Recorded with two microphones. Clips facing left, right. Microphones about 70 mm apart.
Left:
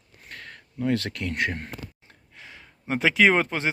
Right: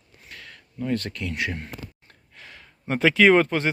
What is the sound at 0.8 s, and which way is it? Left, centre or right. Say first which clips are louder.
Speech: left 2 dB; left.